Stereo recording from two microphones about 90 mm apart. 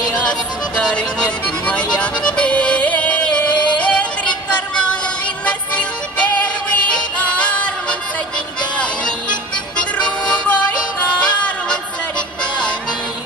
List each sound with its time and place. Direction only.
0.1 s music: 15° left (ahead or behind)
8.7 s music: 15° left (ahead or behind)